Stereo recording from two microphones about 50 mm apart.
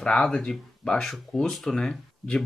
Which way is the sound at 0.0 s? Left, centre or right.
Centre.